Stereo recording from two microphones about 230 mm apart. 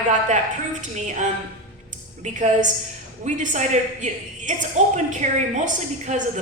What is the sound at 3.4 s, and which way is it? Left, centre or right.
A woman's voice, right.